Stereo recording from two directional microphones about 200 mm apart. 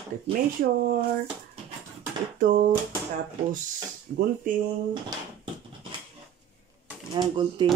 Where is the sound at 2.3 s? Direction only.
40° right (ahead or behind).